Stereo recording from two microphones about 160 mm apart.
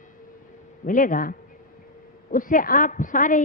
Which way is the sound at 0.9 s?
55° left (ahead or behind).